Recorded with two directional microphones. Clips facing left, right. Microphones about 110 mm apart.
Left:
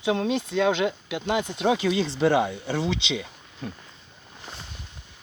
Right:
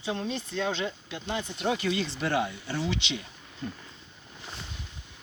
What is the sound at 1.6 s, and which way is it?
Speech, 90° left.